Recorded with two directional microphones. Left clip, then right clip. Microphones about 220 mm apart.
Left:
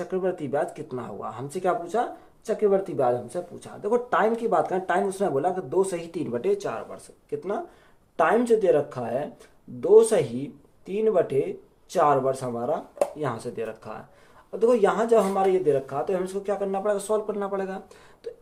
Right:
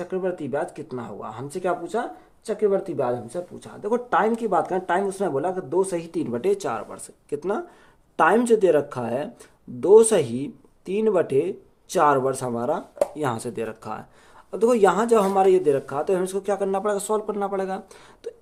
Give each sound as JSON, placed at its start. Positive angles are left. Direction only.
{"t": 0.0, "sound": "speech", "side_deg": -25}